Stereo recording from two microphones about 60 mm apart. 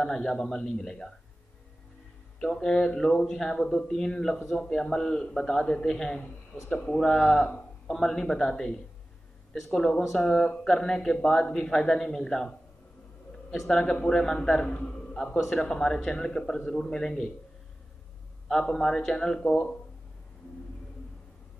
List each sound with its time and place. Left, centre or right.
0.0 s speech: centre
2.3 s speech: centre
18.5 s speech: centre